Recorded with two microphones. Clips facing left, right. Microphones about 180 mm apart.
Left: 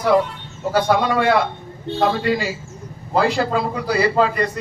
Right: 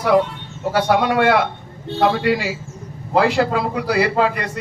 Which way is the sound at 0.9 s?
65° right (ahead or behind).